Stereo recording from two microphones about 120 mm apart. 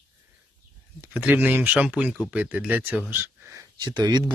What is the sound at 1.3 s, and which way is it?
Speech, 15° right (ahead or behind).